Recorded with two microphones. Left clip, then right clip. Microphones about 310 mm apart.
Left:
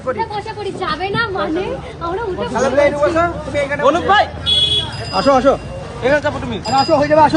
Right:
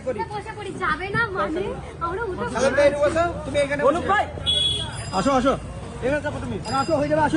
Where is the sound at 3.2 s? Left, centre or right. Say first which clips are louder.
Left 5 dB; left.